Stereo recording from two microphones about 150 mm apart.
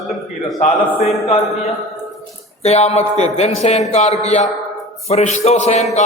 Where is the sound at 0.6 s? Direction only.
65° left (ahead or behind).